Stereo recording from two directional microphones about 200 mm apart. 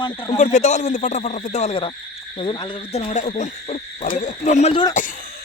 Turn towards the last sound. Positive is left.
turn(degrees=25)  # may be behind; listen again after turning